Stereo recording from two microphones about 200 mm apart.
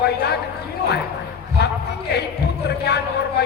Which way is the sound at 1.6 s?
55° left (ahead or behind).